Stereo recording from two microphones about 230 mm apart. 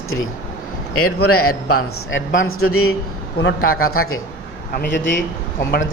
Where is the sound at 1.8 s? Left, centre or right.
Left.